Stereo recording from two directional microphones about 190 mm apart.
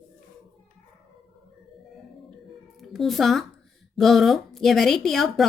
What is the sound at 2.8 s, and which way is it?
A woman's voice, centre (ahead or behind).